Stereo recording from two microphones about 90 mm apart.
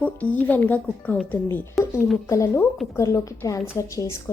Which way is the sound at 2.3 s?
30° left (ahead or behind).